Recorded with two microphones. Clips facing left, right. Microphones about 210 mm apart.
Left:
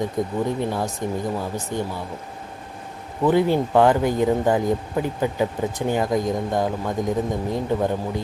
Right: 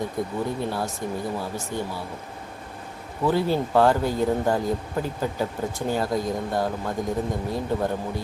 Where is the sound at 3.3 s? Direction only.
15° left (ahead or behind).